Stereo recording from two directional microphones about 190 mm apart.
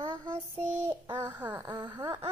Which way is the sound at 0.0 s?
25° right (ahead or behind).